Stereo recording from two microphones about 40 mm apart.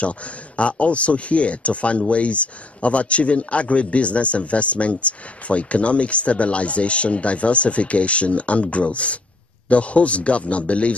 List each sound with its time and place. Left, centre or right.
0.6 s speech: left